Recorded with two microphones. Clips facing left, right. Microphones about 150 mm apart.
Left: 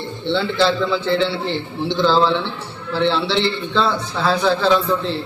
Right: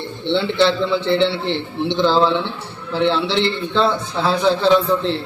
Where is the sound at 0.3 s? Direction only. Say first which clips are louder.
Right 1 dB; 20° right (ahead or behind).